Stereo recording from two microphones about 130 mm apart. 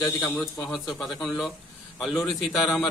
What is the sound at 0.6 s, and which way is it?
A man's voice, centre (ahead or behind).